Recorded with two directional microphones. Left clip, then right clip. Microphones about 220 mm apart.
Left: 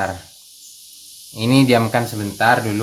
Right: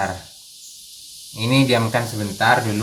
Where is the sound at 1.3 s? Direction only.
45° left (ahead or behind).